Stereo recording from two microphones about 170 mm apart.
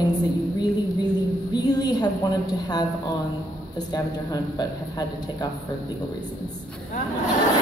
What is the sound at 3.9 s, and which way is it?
A man's voice, 20° left (ahead or behind).